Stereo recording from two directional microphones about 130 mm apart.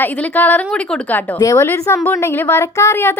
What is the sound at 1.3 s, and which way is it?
A woman's voice, 25° left (ahead or behind).